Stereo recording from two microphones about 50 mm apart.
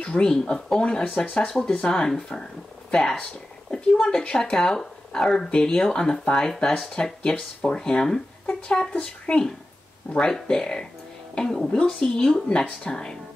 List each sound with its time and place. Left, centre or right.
0.0 s speech: centre
1.5 s speech: centre